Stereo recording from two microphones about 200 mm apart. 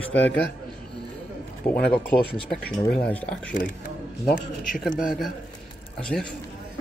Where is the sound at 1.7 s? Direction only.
10° left (ahead or behind).